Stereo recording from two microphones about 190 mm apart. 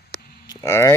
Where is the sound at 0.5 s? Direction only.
15° left (ahead or behind).